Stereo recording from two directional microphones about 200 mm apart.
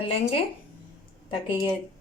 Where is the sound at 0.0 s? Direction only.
30° left (ahead or behind).